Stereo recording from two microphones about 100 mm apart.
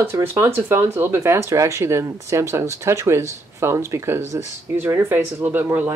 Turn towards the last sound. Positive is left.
turn(degrees=-20)  # may be behind; listen again after turning